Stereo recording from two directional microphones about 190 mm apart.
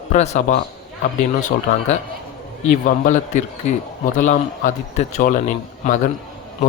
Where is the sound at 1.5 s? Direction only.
55° left (ahead or behind).